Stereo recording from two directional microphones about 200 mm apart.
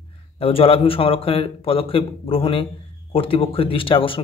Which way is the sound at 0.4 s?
30° left (ahead or behind).